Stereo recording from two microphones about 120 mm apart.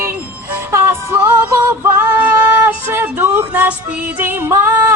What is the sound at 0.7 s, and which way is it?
Music, 20° right (ahead or behind).